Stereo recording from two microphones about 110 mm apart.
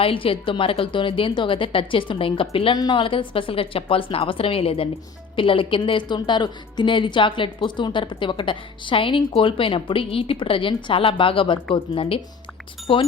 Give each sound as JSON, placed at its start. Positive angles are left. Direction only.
{"t": 0.0, "sound": "a woman's voice", "side_deg": 55}
{"t": 2.7, "sound": "a woman's voice", "side_deg": 35}
{"t": 3.0, "sound": "a woman's voice", "side_deg": 50}